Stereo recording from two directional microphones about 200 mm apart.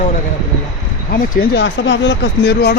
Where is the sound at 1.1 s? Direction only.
55° left (ahead or behind).